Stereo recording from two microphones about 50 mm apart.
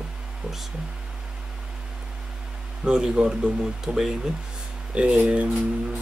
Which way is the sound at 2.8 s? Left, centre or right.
Centre.